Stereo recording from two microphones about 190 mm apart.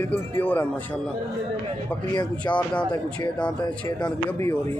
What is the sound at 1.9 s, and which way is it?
Speech, 20° left (ahead or behind).